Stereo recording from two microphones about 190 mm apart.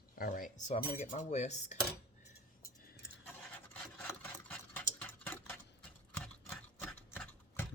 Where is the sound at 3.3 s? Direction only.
10° left (ahead or behind).